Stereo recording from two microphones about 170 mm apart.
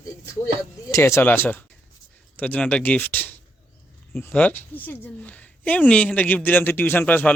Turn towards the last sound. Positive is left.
turn(degrees=10)  # may be behind; listen again after turning